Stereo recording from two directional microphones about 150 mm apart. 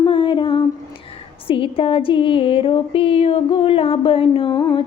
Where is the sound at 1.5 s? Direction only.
35° left (ahead or behind).